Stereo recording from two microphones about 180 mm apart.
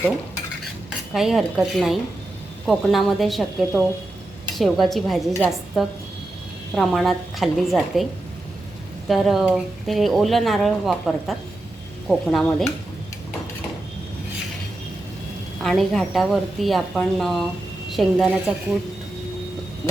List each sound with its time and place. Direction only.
1.1 s speech: centre (ahead or behind)
4.5 s speech: centre (ahead or behind)
9.0 s speech: centre (ahead or behind)
15.6 s speech: centre (ahead or behind)